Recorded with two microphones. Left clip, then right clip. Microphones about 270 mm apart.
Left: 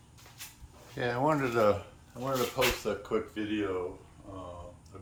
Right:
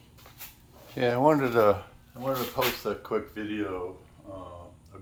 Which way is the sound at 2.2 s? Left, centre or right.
Centre.